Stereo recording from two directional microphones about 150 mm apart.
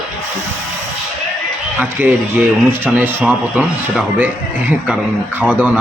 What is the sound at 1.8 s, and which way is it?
Speech, 10° right (ahead or behind).